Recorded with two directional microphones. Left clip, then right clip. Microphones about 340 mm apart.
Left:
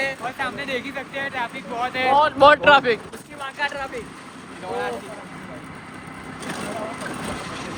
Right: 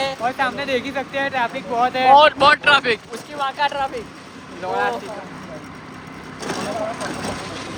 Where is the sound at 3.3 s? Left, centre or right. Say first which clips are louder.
Right 6 dB; centre.